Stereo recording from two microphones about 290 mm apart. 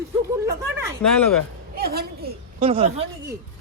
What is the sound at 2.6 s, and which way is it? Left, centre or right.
Speech, centre.